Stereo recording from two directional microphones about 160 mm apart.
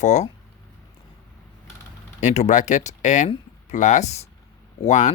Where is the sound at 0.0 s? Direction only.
45° left (ahead or behind).